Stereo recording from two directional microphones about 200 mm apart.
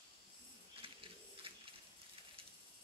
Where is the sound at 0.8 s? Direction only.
25° right (ahead or behind).